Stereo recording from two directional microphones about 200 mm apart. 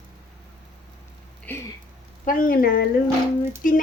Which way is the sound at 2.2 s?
45° left (ahead or behind).